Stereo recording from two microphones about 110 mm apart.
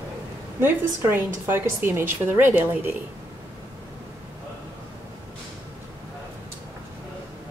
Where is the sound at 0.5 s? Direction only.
20° right (ahead or behind).